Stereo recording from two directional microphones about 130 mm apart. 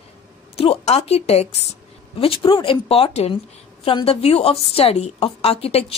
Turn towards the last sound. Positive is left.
turn(degrees=50)  # may be behind; listen again after turning